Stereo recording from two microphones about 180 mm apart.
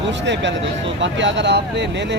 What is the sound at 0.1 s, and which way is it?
Speech, 80° right.